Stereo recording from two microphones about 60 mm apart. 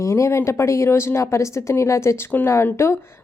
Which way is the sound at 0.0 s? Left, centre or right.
Left.